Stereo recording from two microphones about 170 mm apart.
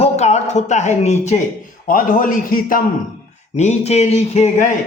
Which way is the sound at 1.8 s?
55° left (ahead or behind).